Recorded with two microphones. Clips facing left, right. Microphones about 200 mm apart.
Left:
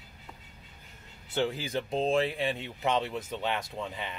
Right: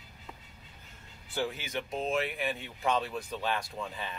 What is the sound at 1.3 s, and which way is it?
Speech, 30° left (ahead or behind).